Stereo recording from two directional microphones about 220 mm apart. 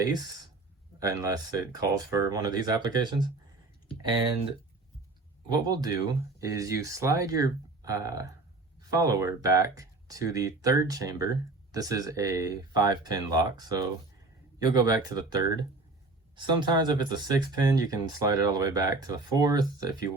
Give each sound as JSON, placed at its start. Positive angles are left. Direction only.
{"t": 0.9, "sound": "speech", "side_deg": -15}
{"t": 5.5, "sound": "speech", "side_deg": -20}